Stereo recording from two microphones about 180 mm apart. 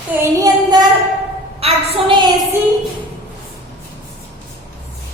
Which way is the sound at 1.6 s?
30° right (ahead or behind).